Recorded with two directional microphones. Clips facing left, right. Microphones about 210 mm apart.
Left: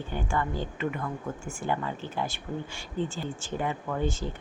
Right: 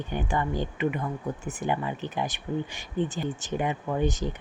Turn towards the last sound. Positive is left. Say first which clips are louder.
# right 3 dB
turn(degrees=-15)  # may be behind; listen again after turning